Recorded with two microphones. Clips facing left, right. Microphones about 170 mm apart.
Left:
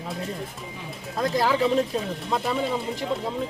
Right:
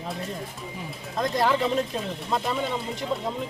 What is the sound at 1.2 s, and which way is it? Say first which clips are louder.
Speech: left 1 dB; 5° left (ahead or behind).